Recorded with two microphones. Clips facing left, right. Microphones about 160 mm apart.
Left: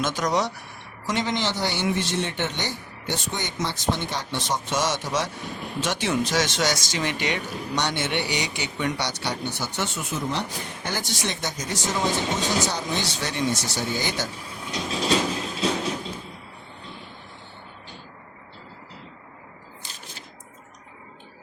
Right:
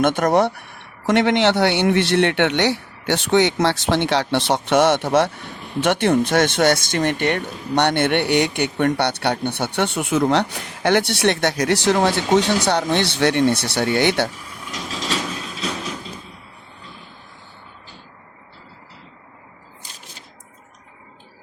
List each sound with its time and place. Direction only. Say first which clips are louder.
0.0 s speech: right 8 dB; 55° right (ahead or behind)